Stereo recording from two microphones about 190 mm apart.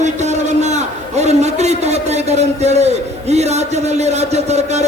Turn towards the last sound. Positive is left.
turn(degrees=-35)  # may be behind; listen again after turning